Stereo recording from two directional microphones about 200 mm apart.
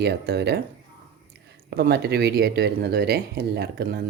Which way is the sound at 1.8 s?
55° right (ahead or behind).